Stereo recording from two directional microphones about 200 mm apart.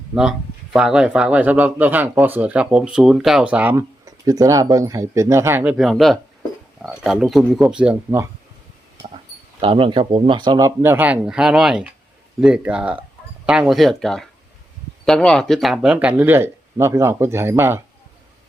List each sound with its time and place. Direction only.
0.1 s a man's voice: 5° right (ahead or behind)
9.6 s a man's voice: 25° right (ahead or behind)